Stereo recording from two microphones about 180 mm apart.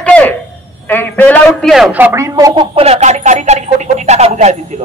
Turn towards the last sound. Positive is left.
turn(degrees=-40)  # may be behind; listen again after turning